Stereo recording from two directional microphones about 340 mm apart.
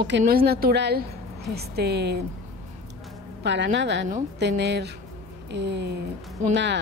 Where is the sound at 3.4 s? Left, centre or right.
Right.